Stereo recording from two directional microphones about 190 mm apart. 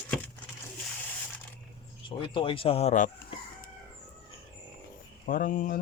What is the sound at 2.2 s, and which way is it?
Speech, 25° left (ahead or behind).